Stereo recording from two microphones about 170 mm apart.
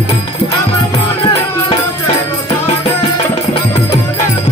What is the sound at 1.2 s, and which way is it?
Music, 30° left (ahead or behind).